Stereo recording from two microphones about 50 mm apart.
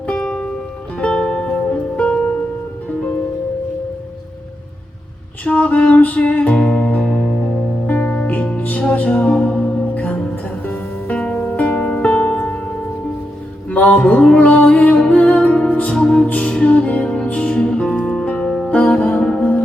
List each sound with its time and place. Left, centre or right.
0.2 s music: centre
5.5 s music: left
7.9 s music: left
11.3 s music: left
13.7 s music: left
18.3 s music: left